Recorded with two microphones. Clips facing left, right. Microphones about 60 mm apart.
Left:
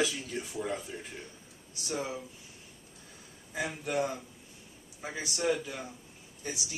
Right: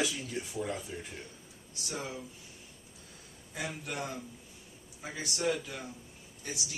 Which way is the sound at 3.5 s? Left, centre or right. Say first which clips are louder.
Left 6 dB; centre.